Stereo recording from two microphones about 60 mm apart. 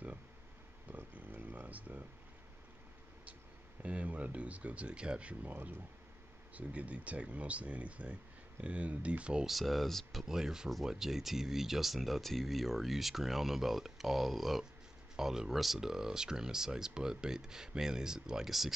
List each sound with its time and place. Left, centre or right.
0.9 s a sound: right
3.8 s speech: right
9.5 s speech: centre
10.2 s speech: centre